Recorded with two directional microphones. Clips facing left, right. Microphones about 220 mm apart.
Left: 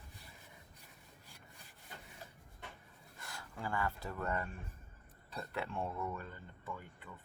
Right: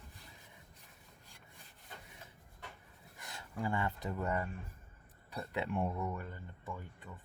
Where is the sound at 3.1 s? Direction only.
20° right (ahead or behind).